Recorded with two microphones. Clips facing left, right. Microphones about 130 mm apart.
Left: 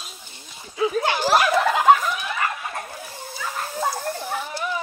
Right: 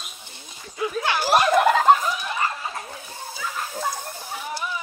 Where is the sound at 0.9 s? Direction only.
45° left (ahead or behind).